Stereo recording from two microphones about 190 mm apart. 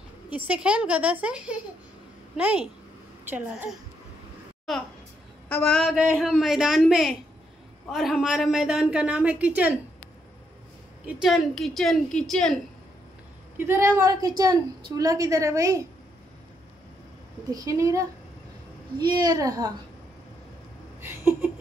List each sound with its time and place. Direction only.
0.3 s a woman's voice: 5° right (ahead or behind)
11.1 s a woman's voice: centre (ahead or behind)
13.7 s a woman's voice: 15° right (ahead or behind)
17.5 s a woman's voice: 20° right (ahead or behind)
21.0 s a sound: 10° right (ahead or behind)